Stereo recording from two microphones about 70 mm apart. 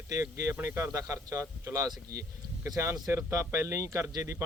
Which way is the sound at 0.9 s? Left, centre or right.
Right.